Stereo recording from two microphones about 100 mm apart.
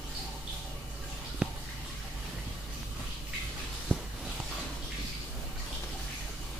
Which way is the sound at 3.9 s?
10° left (ahead or behind).